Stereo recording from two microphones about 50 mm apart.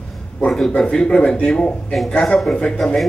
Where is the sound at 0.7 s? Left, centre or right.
Centre.